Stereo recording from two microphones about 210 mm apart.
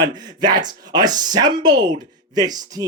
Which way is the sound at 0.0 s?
20° right (ahead or behind).